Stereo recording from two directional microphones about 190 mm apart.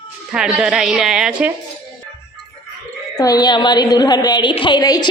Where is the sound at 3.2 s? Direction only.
20° left (ahead or behind).